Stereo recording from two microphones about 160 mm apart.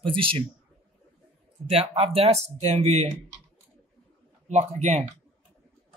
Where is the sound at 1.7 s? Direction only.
40° right (ahead or behind).